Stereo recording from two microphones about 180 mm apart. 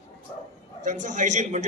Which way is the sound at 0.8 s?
45° right (ahead or behind).